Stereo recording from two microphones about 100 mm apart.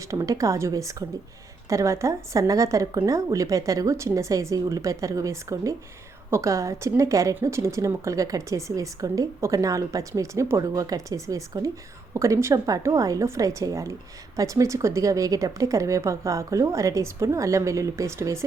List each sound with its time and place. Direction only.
0.1 s a woman's voice: 30° right (ahead or behind)